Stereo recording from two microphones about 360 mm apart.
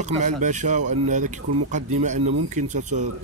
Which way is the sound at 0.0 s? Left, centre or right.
Centre.